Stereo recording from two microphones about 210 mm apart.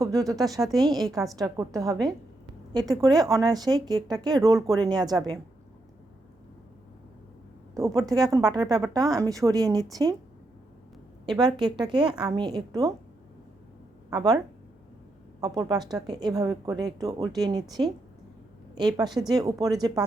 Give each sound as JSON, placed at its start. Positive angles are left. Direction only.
{"t": 0.0, "sound": "speech", "side_deg": -15}
{"t": 0.8, "sound": "a woman's voice", "side_deg": 0}
{"t": 1.4, "sound": "a woman's voice", "side_deg": -15}
{"t": 7.8, "sound": "a woman's voice", "side_deg": -15}
{"t": 11.3, "sound": "a woman's voice", "side_deg": -20}
{"t": 14.1, "sound": "a woman's voice", "side_deg": -15}
{"t": 15.4, "sound": "a woman's voice", "side_deg": -20}